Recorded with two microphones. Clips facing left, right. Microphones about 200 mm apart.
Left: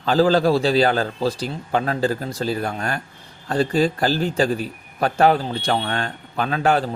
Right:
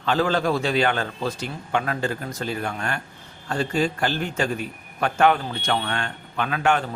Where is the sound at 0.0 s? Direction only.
35° left (ahead or behind).